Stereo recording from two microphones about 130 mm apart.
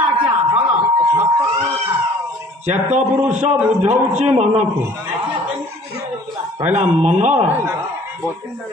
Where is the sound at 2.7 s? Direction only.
65° right (ahead or behind).